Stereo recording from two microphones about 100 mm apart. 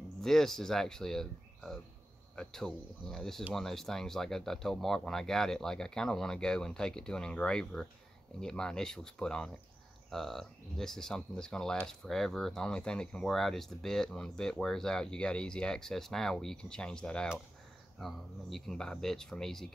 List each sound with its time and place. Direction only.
0.2 s speech: 5° left (ahead or behind)